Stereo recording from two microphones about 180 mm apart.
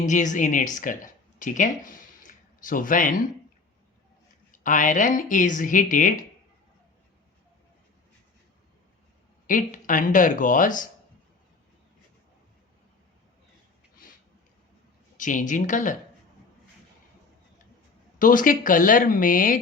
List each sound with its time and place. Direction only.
0.1 s speech: 45° left (ahead or behind)
4.5 s a woman's voice: 45° left (ahead or behind)
9.5 s a woman's voice: 50° left (ahead or behind)
15.2 s a woman's voice: 45° left (ahead or behind)
18.2 s a woman's voice: 50° left (ahead or behind)